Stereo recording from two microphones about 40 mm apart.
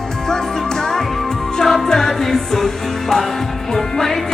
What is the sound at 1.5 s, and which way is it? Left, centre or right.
Music, centre.